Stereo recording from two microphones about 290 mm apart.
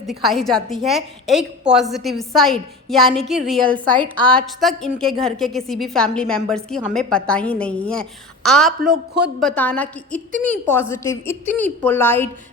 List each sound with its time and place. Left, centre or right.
0.1 s a woman's voice: centre
3.9 s a woman's voice: centre
4.3 s a woman's voice: centre